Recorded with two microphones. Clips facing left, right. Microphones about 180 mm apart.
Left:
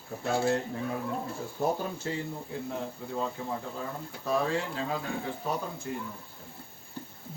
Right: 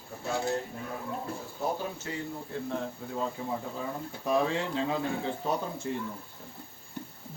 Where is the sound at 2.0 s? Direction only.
30° left (ahead or behind).